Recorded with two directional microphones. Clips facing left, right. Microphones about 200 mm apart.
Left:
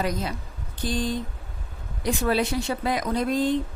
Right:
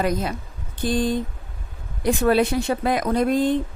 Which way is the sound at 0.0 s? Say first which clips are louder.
Right 4 dB; 55° right (ahead or behind).